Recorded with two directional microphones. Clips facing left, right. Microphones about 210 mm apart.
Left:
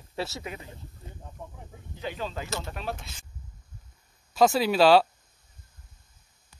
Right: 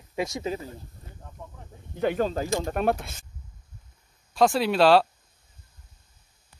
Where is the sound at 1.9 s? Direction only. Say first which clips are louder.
Right 10 dB; 55° right (ahead or behind).